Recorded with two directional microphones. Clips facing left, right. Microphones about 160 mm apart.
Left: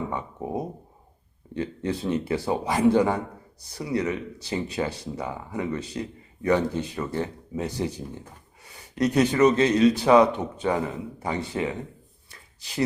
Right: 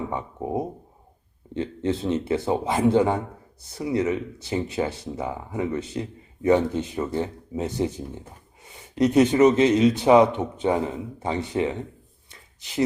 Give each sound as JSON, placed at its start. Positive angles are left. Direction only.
{"t": 0.1, "sound": "speech", "side_deg": -20}
{"t": 9.0, "sound": "speech", "side_deg": -20}
{"t": 12.3, "sound": "a sound", "side_deg": -20}